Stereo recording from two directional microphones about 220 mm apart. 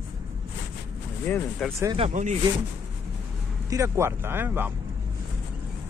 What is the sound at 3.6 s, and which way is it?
Speech, 15° right (ahead or behind).